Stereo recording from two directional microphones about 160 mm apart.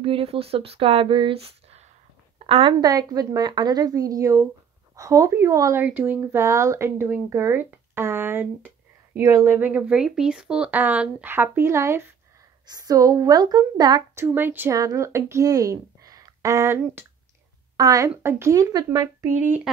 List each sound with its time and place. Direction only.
0.0 s speech: 35° right (ahead or behind)
2.3 s a sound: 35° right (ahead or behind)
2.8 s speech: 25° right (ahead or behind)
14.2 s speech: 15° right (ahead or behind)